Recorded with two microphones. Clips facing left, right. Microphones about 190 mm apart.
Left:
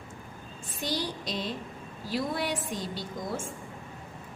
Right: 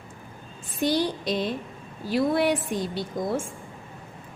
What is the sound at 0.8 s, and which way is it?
A woman's voice, 60° right (ahead or behind).